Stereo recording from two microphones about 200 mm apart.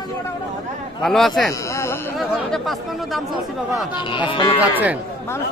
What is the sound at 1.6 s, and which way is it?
Speech, 15° left (ahead or behind).